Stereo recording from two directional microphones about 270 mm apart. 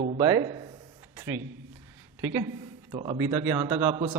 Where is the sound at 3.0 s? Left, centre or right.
Centre.